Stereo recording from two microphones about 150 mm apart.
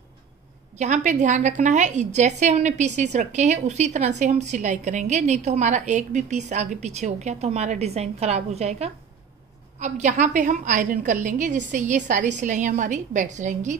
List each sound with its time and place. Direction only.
0.7 s a woman's voice: 50° right (ahead or behind)